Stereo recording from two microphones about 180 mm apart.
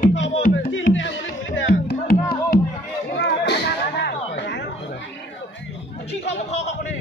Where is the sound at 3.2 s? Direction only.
70° left (ahead or behind).